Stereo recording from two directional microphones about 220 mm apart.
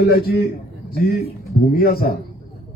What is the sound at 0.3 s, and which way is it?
A man's voice, 45° left (ahead or behind).